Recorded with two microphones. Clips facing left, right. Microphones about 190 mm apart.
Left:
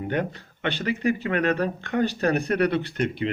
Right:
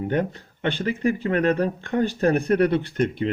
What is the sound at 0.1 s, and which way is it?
A man's voice, 40° right (ahead or behind).